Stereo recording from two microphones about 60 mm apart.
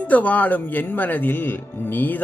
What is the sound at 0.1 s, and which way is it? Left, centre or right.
Speech, left.